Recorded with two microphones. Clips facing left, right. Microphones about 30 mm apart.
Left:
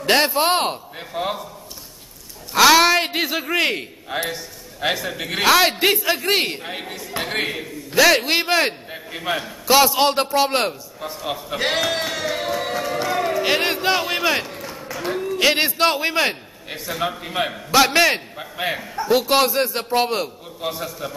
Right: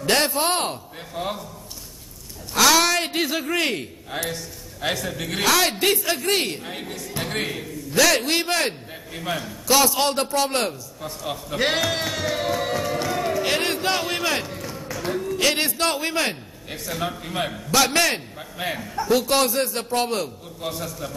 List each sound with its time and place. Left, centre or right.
0.0 s a man's voice: centre
2.5 s a man's voice: left
11.5 s a man's voice: centre